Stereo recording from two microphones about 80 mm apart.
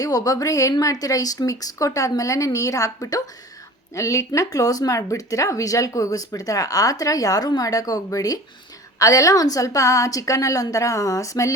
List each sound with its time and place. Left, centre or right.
0.0 s speech: left